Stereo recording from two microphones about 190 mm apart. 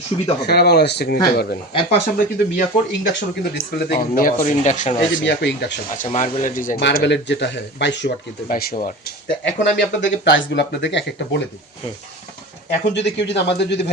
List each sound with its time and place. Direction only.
0.1 s speech: 25° left (ahead or behind)
0.4 s speech: 60° left (ahead or behind); by 4.9 s 40° left (ahead or behind)
4.9 s speech: 65° left (ahead or behind)
6.0 s speech: 40° left (ahead or behind)
6.7 s speech: 65° left (ahead or behind)
8.4 s speech: 45° left (ahead or behind)
9.4 s speech: 70° left (ahead or behind)
12.9 s speech: 65° left (ahead or behind)